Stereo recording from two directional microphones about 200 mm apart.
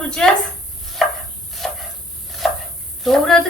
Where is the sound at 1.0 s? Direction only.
Centre (ahead or behind).